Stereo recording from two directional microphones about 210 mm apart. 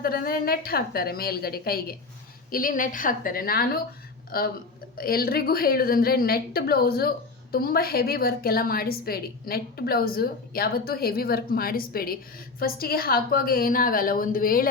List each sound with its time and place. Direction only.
0.0 s a woman's voice: 45° left (ahead or behind)